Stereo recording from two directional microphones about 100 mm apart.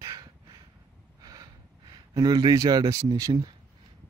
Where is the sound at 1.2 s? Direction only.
40° right (ahead or behind).